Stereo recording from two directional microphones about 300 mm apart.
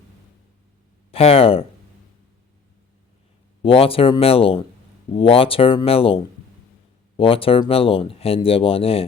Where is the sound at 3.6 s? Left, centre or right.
Centre.